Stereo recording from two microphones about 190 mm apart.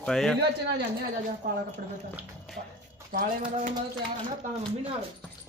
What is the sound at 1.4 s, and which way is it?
Speech, 45° right (ahead or behind).